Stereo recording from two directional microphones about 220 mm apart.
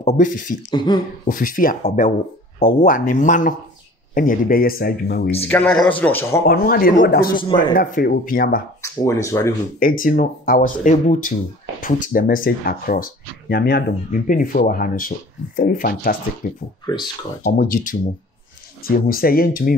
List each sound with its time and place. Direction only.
0.0 s speech: 35° left (ahead or behind)
0.7 s speech: 20° left (ahead or behind)
1.2 s speech: 40° left (ahead or behind)
5.5 s a man's voice: 5° left (ahead or behind)
6.4 s speech: 45° left (ahead or behind)
8.8 s a man's voice: 15° left (ahead or behind)
9.8 s speech: 40° left (ahead or behind)
17.4 s speech: 40° left (ahead or behind)